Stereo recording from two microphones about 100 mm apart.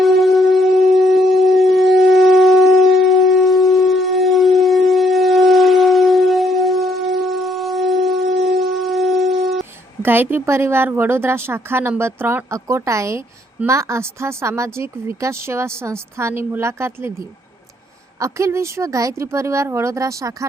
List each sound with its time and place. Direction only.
0.0 s wind instrument: centre (ahead or behind)
10.0 s speech: 20° right (ahead or behind)